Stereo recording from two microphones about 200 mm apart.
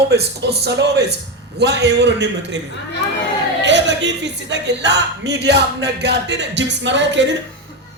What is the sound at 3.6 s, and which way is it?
Speech, 65° right (ahead or behind).